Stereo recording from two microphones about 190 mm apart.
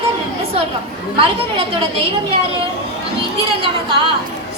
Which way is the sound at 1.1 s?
30° right (ahead or behind).